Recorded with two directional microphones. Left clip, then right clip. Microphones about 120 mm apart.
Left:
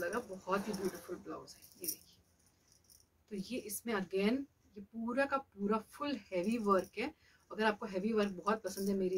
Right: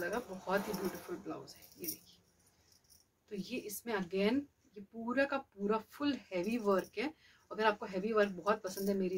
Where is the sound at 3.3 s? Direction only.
30° left (ahead or behind).